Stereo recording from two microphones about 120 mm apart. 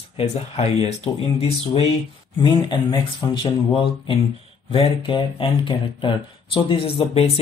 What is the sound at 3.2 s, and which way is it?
Speech, 30° left (ahead or behind).